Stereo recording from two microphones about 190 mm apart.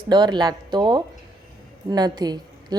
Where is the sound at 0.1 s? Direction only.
20° right (ahead or behind).